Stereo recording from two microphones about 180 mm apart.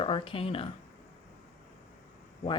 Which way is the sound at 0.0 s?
30° left (ahead or behind).